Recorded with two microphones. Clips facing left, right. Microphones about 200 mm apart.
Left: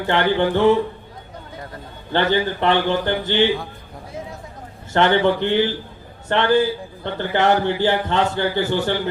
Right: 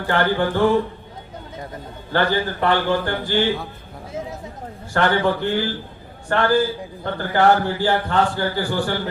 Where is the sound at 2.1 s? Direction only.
20° left (ahead or behind).